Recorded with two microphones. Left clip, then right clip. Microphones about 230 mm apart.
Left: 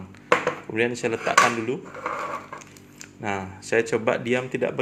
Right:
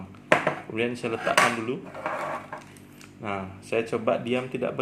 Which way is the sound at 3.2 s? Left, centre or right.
Left.